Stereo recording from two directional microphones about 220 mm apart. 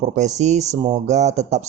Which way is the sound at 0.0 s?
30° right (ahead or behind).